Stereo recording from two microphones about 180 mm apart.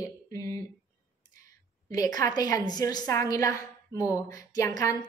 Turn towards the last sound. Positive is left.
turn(degrees=20)  # may be behind; listen again after turning